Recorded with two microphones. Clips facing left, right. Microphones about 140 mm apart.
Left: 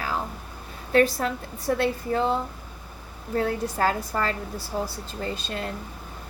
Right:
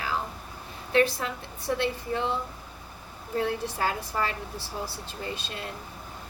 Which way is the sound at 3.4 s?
45° left (ahead or behind).